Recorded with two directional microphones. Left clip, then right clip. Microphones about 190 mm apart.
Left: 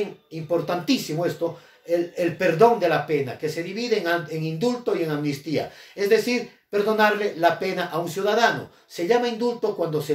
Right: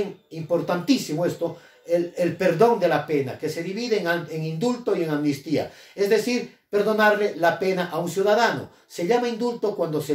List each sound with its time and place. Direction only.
0.7 s speech: centre (ahead or behind)